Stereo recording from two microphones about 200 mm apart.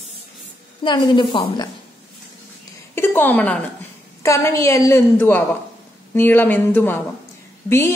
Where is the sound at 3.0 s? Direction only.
10° left (ahead or behind).